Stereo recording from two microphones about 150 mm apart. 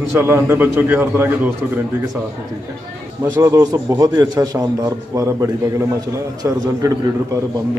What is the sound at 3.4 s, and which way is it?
A man's voice, 20° right (ahead or behind).